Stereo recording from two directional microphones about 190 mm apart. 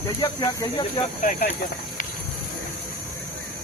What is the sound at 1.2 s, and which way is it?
Speech, 45° left (ahead or behind).